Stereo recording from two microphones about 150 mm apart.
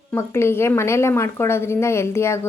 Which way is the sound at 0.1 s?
15° left (ahead or behind).